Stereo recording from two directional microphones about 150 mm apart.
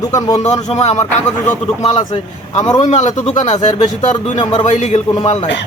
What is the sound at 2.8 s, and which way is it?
Speech, 50° left (ahead or behind).